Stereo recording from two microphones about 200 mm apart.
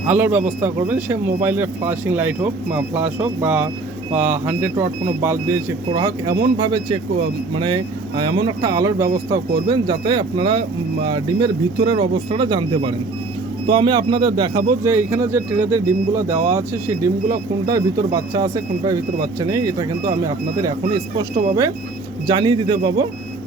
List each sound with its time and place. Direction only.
0.1 s speech: 10° right (ahead or behind)
5.9 s speech: 15° right (ahead or behind)
22.3 s speech: 20° right (ahead or behind)